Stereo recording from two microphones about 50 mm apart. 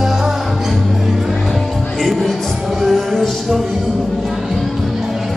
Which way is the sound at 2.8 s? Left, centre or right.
Centre.